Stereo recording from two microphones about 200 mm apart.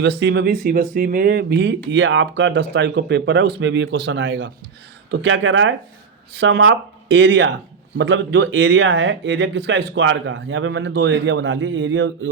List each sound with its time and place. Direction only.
0.0 s speech: 60° right (ahead or behind)
6.3 s speech: 60° right (ahead or behind)